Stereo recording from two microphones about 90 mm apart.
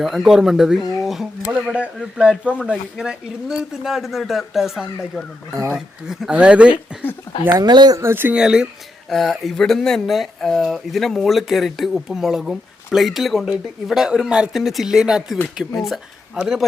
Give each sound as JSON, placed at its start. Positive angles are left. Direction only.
{"t": 0.0, "sound": "speech", "side_deg": 0}
{"t": 1.0, "sound": "a sound", "side_deg": -5}
{"t": 2.0, "sound": "speech", "side_deg": -5}
{"t": 7.5, "sound": "speech", "side_deg": -55}
{"t": 7.9, "sound": "speech", "side_deg": -25}
{"t": 8.4, "sound": "speech", "side_deg": -10}
{"t": 9.0, "sound": "speech", "side_deg": 5}